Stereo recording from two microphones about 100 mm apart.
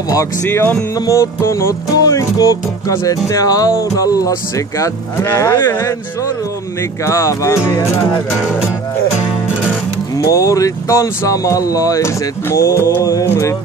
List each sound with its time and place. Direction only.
0.1 s speech: 30° left (ahead or behind)
0.9 s music: 35° left (ahead or behind)
7.1 s music: 30° left (ahead or behind)
10.1 s music: 35° left (ahead or behind)